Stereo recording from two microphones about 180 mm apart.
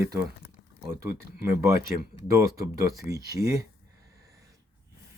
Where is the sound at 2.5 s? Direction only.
20° right (ahead or behind).